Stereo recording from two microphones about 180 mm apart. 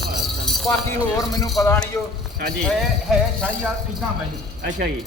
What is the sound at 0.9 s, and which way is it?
A man's voice, 20° left (ahead or behind).